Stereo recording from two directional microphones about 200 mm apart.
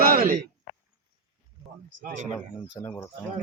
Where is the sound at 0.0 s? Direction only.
45° right (ahead or behind).